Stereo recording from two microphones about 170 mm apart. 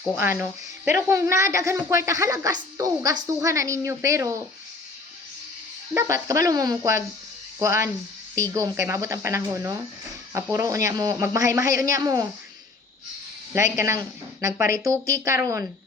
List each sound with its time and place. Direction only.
0.2 s speech: 10° right (ahead or behind)
5.9 s speech: 20° right (ahead or behind)
13.5 s speech: 15° right (ahead or behind)